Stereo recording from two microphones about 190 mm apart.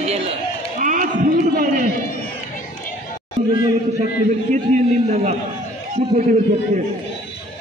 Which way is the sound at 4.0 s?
40° right (ahead or behind).